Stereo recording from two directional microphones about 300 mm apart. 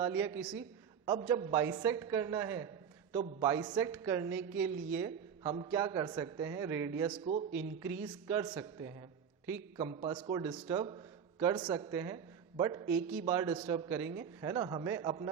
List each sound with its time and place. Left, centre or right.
0.0 s a man's voice: centre
7.5 s a man's voice: centre